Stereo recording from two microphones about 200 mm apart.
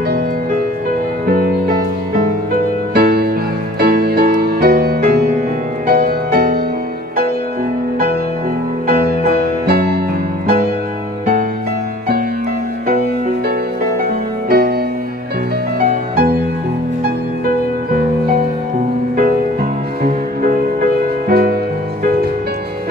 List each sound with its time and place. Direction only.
1.3 s music: 45° right (ahead or behind)
8.8 s music: 50° right (ahead or behind)
14.0 s music: 50° right (ahead or behind)
21.3 s music: 50° right (ahead or behind)